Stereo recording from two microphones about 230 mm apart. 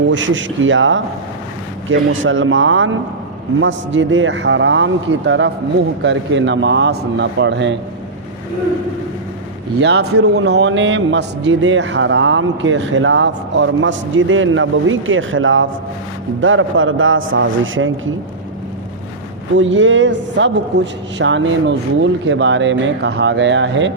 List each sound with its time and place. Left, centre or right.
0.1 s a man's voice: right
9.8 s a man's voice: right
19.5 s speech: right